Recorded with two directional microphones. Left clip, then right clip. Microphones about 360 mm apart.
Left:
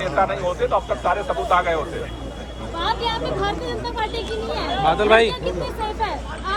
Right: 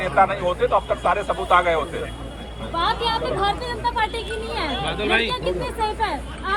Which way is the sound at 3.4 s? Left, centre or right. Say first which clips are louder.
Right 2 dB; centre.